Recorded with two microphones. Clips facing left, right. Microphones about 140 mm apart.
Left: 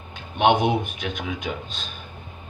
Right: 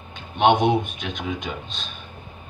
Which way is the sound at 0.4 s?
5° left (ahead or behind).